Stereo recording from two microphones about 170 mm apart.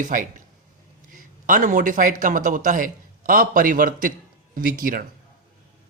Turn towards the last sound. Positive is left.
turn(degrees=-55)  # may be behind; listen again after turning